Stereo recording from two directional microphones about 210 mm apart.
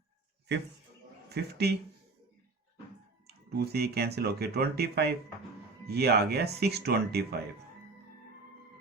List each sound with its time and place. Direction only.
0.5 s speech: 55° right (ahead or behind)
3.2 s speech: 50° right (ahead or behind)